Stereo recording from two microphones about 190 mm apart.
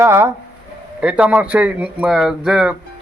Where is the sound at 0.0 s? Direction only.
15° right (ahead or behind).